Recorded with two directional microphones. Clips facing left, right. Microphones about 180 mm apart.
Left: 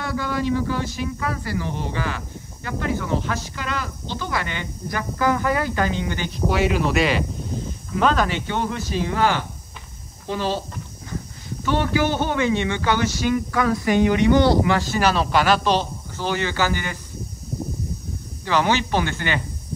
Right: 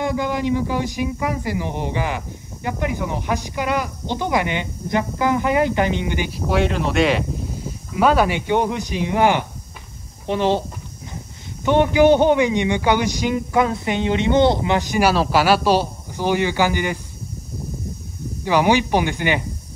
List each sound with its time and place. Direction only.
0.0 s speech: 15° right (ahead or behind)
6.4 s speech: 5° left (ahead or behind)
7.9 s speech: 10° right (ahead or behind)
11.6 s speech: 20° right (ahead or behind)
18.4 s speech: 15° right (ahead or behind)